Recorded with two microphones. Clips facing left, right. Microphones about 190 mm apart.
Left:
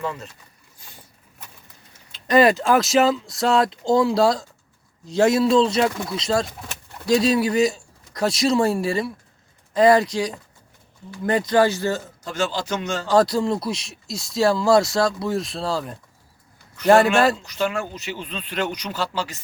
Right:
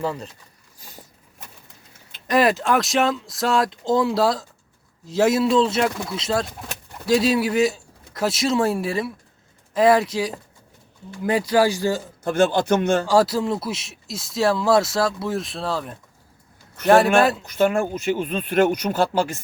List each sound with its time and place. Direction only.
0.0 s speech: 35° right (ahead or behind)
2.2 s speech: centre (ahead or behind)
12.2 s a man's voice: 55° right (ahead or behind)
13.1 s speech: 5° right (ahead or behind)
17.4 s speech: 50° right (ahead or behind)